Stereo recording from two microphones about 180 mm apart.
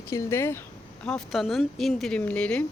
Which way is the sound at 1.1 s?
Centre (ahead or behind).